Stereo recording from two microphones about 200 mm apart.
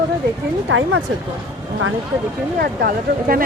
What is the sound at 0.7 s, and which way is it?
Speech, 75° right (ahead or behind).